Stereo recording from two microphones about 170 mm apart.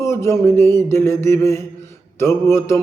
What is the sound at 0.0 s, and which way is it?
Speech, 15° left (ahead or behind).